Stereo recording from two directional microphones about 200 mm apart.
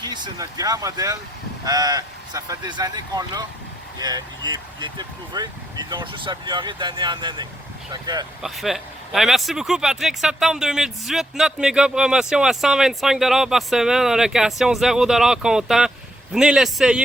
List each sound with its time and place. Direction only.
0.0 s speech: 20° right (ahead or behind)
8.4 s speech: centre (ahead or behind)